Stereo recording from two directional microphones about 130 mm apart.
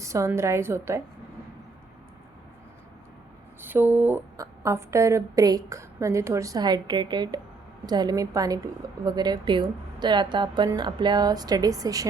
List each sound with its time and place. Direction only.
0.0 s a woman's voice: 25° right (ahead or behind)
3.6 s a woman's voice: 15° right (ahead or behind)